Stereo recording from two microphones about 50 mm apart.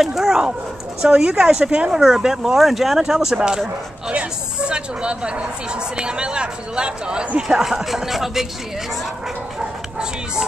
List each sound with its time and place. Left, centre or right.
0.0 s speech: centre
2.0 s speech: centre
4.1 s speech: centre
9.6 s dog: centre